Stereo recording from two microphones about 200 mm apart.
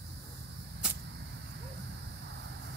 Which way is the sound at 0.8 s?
5° right (ahead or behind).